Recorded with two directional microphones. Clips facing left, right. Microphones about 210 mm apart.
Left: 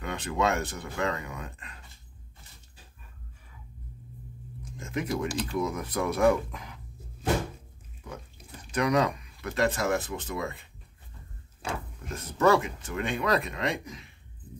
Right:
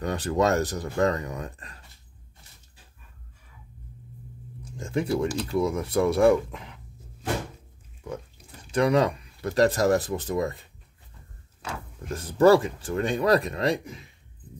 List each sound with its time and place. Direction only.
0.0 s speech: 40° right (ahead or behind)
4.7 s speech: 30° right (ahead or behind)
8.7 s speech: 30° right (ahead or behind)
12.1 s speech: 35° right (ahead or behind)